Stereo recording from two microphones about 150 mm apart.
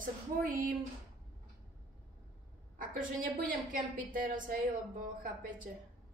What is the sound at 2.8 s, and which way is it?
A woman's voice, 65° right (ahead or behind).